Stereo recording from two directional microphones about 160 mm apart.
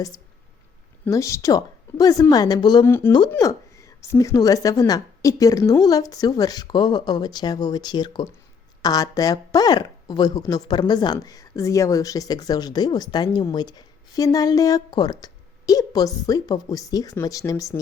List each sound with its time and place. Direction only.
1.0 s speech: 20° left (ahead or behind)